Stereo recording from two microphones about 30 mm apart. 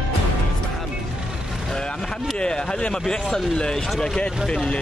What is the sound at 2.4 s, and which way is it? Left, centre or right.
Speech, left.